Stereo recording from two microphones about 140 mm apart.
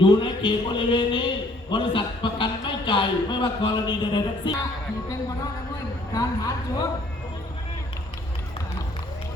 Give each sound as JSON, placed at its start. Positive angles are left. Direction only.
{"t": 0.0, "sound": "speech", "side_deg": 35}
{"t": 6.1, "sound": "speech", "side_deg": 30}